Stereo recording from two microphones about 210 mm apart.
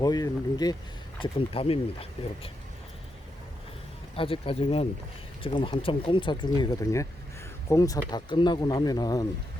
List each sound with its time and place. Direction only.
0.0 s speech: 20° left (ahead or behind)
4.2 s speech: 25° left (ahead or behind)